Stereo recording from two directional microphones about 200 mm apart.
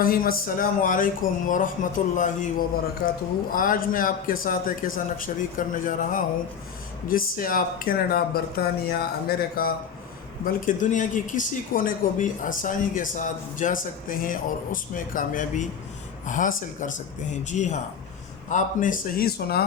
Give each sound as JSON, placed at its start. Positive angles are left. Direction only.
{"t": 0.0, "sound": "a man's voice", "side_deg": 45}